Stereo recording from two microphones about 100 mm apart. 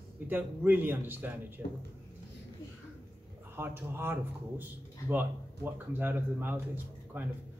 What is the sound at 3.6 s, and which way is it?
Speech, 25° right (ahead or behind).